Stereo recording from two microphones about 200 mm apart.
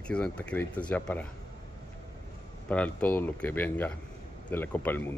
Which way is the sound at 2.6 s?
5° left (ahead or behind).